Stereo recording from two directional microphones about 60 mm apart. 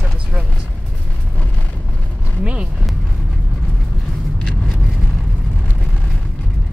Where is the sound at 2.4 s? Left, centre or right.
Centre.